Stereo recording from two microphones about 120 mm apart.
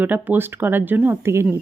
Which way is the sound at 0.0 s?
15° right (ahead or behind).